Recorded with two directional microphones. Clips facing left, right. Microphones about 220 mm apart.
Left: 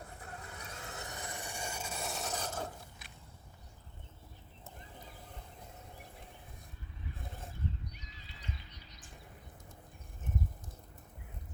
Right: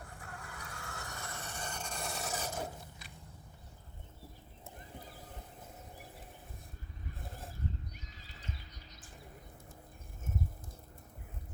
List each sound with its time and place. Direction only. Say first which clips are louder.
0.0 s vehicle: left 1 dB; 20° left (ahead or behind); by 2.6 s 10° right (ahead or behind)